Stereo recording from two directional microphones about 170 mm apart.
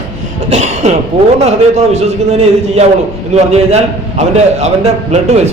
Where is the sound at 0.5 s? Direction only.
40° right (ahead or behind).